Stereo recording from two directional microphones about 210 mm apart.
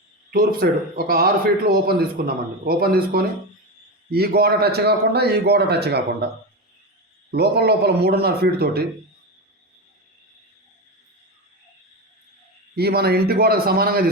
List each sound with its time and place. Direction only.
0.3 s speech: 45° right (ahead or behind)
7.3 s speech: 50° right (ahead or behind)
12.7 s speech: 50° right (ahead or behind)